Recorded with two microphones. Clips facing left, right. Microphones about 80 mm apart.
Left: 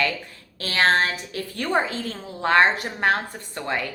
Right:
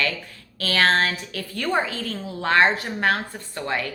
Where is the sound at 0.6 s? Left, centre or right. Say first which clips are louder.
Even; left.